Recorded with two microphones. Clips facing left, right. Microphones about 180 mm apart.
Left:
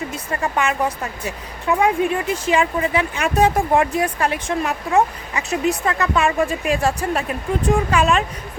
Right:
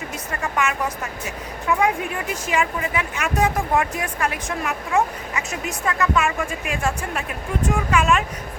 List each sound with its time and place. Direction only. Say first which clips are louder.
0.3 s speech: left 3 dB; 30° left (ahead or behind)